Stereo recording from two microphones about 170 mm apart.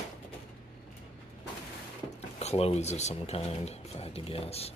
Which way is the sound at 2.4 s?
40° left (ahead or behind).